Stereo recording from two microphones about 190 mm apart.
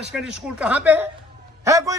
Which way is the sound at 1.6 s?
15° right (ahead or behind).